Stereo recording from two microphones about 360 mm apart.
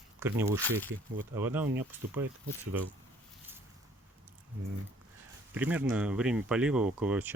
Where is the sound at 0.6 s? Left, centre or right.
Centre.